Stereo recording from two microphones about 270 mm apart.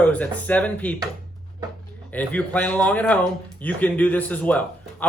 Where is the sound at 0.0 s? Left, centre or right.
Centre.